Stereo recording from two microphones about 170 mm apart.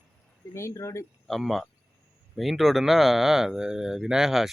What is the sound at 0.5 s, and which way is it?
Speech, 15° left (ahead or behind).